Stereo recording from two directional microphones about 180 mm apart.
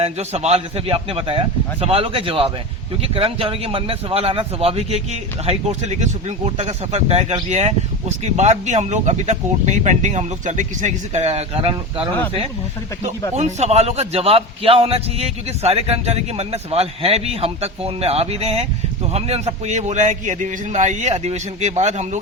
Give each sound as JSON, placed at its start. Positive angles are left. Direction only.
{"t": 0.0, "sound": "a man's voice", "side_deg": -35}
{"t": 13.3, "sound": "a man's voice", "side_deg": -40}